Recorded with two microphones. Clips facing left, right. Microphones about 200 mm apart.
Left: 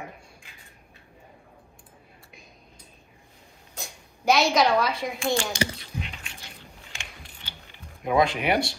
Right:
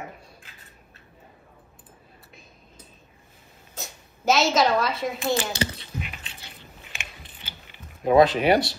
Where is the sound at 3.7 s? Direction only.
5° right (ahead or behind).